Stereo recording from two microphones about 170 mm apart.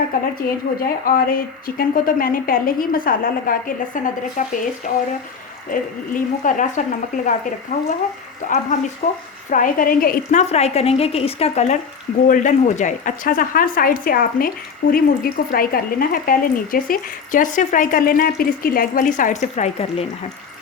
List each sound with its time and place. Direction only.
0.4 s a woman's voice: 55° left (ahead or behind)
10.5 s a woman's voice: 40° left (ahead or behind)